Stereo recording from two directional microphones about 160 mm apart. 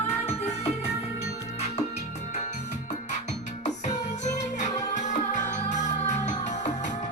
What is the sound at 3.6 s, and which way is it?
Music, 45° left (ahead or behind).